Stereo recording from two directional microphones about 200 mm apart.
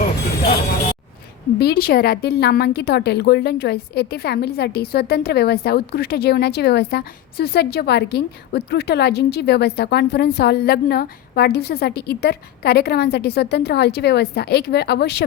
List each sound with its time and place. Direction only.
1.5 s a woman's voice: 50° left (ahead or behind)